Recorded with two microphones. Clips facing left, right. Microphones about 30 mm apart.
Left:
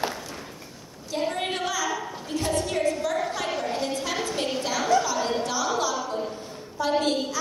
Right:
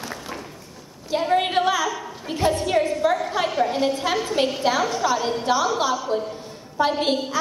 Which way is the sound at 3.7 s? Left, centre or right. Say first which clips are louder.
Right 6 dB; centre.